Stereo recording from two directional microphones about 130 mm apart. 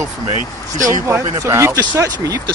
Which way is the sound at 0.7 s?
80° right.